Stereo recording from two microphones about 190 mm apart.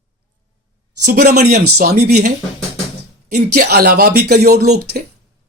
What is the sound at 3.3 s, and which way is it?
Speech, 55° right (ahead or behind).